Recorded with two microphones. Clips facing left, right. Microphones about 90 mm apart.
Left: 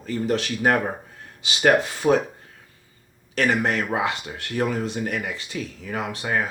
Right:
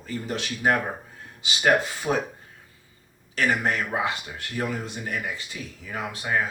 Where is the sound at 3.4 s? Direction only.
60° left (ahead or behind).